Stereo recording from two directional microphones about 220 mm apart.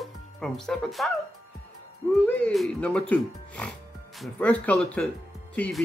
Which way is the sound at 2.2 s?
5° left (ahead or behind).